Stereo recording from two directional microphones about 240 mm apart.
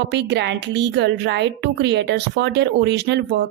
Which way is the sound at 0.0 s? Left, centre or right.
Right.